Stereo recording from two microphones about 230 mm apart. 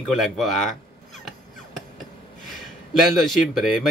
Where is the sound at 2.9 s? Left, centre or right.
Centre.